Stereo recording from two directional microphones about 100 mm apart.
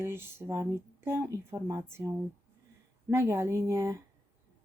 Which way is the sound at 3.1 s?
25° right (ahead or behind).